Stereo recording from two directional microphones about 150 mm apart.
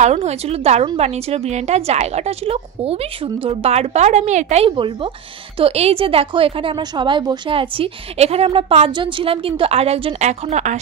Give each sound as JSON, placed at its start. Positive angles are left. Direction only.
{"t": 0.0, "sound": "a woman's voice", "side_deg": -45}
{"t": 4.6, "sound": "a woman's voice", "side_deg": -35}